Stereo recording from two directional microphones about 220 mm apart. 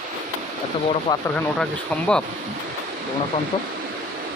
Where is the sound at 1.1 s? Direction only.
20° left (ahead or behind).